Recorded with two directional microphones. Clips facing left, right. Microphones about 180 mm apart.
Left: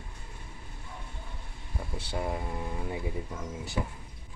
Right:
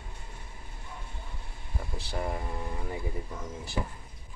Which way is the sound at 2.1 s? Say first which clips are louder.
Left 1 dB; 5° left (ahead or behind).